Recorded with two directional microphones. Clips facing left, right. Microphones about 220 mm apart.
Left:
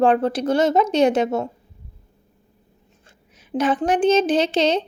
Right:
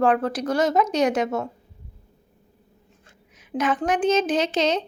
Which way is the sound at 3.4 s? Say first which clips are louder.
Left 3 dB; 30° left (ahead or behind).